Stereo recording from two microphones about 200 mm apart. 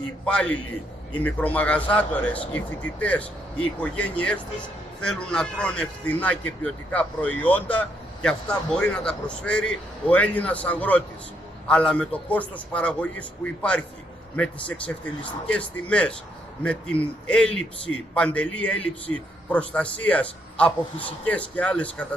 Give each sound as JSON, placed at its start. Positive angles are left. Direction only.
{"t": 0.2, "sound": "a man's voice", "side_deg": 5}